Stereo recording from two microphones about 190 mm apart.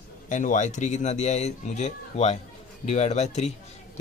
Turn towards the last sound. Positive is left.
turn(degrees=35)  # may be behind; listen again after turning